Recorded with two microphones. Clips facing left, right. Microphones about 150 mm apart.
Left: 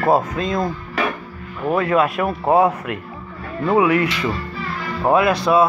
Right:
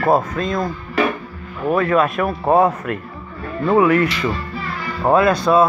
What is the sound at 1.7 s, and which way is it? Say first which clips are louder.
Speech: right 1 dB; 15° left (ahead or behind).